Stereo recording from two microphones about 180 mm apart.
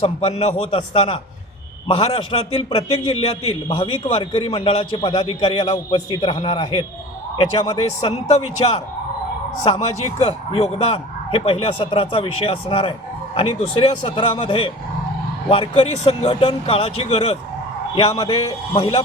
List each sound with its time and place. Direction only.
0.0 s a man's voice: 35° left (ahead or behind)